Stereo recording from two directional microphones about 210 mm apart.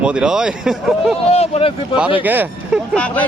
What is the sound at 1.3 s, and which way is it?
Speech, 30° left (ahead or behind).